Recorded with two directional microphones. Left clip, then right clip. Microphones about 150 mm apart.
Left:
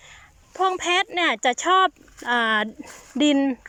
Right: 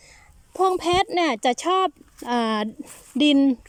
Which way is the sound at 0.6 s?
45° right (ahead or behind).